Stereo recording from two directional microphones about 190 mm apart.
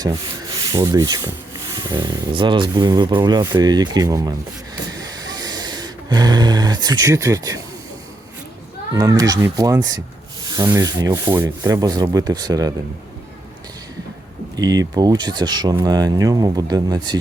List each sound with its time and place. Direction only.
0.6 s speech: 20° right (ahead or behind)
4.9 s a sound: 20° right (ahead or behind)
8.9 s speech: 20° right (ahead or behind)
14.5 s speech: 20° right (ahead or behind)